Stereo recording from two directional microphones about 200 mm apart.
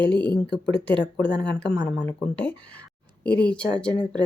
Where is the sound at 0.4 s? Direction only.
60° left (ahead or behind).